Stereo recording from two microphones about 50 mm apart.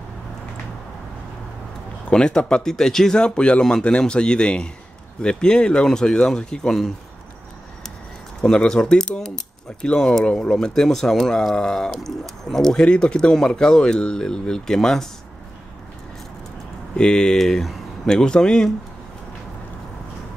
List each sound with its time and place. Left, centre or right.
2.0 s speech: centre
8.4 s speech: centre
12.7 s speech: centre
16.9 s speech: centre